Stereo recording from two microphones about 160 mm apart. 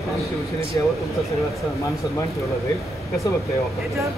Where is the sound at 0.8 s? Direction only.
25° left (ahead or behind).